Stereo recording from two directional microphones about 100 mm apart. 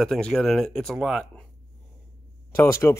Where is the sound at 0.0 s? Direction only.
5° left (ahead or behind).